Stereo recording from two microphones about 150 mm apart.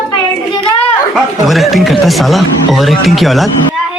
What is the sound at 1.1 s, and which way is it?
Speech, centre (ahead or behind).